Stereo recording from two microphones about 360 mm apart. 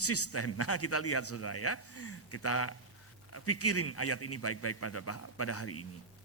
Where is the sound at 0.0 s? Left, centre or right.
Left.